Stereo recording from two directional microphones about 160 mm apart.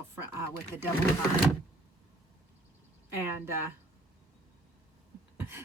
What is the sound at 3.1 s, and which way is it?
Speech, 15° right (ahead or behind).